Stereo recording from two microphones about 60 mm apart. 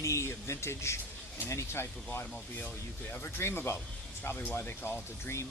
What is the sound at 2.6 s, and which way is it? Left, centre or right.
Speech, left.